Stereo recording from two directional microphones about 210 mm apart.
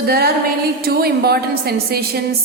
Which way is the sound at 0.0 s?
45° right (ahead or behind).